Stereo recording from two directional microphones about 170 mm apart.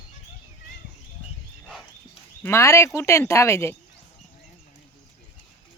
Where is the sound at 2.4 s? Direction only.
15° left (ahead or behind).